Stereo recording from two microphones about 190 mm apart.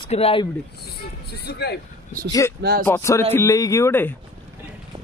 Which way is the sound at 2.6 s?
55° right (ahead or behind).